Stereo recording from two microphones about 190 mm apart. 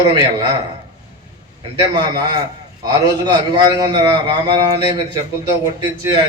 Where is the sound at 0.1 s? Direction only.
20° right (ahead or behind).